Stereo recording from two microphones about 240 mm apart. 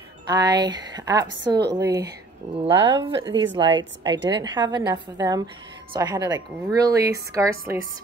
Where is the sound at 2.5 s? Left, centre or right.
Right.